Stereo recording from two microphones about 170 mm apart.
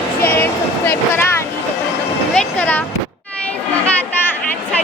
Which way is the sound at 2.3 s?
5° left (ahead or behind).